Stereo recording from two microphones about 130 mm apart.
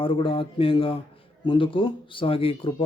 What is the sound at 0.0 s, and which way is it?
Speech, 45° left (ahead or behind).